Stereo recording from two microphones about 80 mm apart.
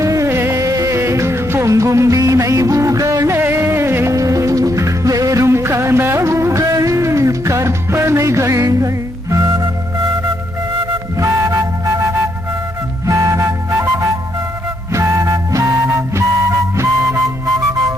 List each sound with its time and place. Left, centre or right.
0.0 s music: right
4.1 s music: right
9.3 s organ: right
11.2 s music: right